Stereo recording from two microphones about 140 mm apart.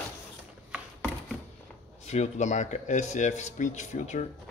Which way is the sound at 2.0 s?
55° left (ahead or behind).